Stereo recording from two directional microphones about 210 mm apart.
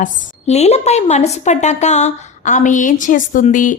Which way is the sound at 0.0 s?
30° left (ahead or behind).